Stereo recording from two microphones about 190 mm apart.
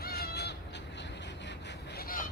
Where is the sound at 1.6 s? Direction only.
55° left (ahead or behind).